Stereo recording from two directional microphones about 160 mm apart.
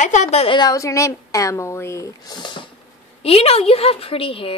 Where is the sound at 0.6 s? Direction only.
20° left (ahead or behind).